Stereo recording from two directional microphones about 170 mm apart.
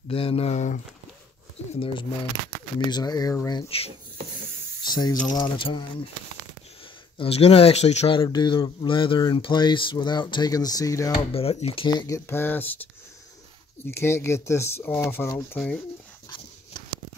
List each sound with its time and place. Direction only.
0.1 s speech: 35° left (ahead or behind)
4.8 s speech: 25° left (ahead or behind)
7.2 s speech: 35° left (ahead or behind); by 11.1 s 20° left (ahead or behind)
11.3 s speech: 35° left (ahead or behind)
12.1 s speech: 15° left (ahead or behind)
13.8 s speech: 15° left (ahead or behind)